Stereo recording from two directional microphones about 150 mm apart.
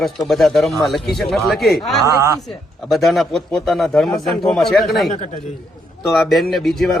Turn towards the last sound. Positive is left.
turn(degrees=0)  # may be behind; listen again after turning